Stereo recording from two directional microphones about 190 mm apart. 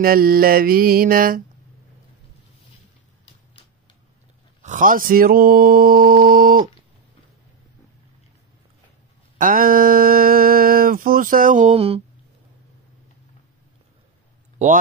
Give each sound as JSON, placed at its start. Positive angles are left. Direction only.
{"t": 0.0, "sound": "speech", "side_deg": -50}
{"t": 4.6, "sound": "speech", "side_deg": -40}
{"t": 9.4, "sound": "a sound", "side_deg": -50}